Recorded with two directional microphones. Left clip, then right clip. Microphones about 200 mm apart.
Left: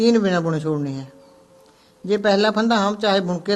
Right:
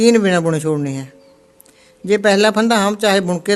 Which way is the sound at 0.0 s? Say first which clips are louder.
Right 5 dB; 50° right (ahead or behind).